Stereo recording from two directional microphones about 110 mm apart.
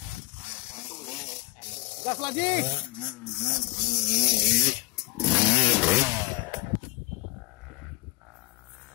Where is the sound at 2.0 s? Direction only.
45° left (ahead or behind).